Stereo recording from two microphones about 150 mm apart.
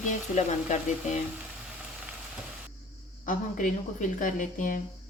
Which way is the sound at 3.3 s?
60° left (ahead or behind).